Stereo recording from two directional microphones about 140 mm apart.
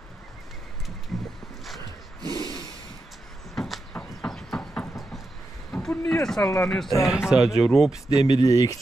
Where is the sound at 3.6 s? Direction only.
5° left (ahead or behind).